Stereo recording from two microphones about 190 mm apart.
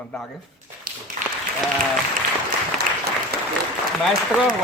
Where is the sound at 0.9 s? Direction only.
45° right (ahead or behind).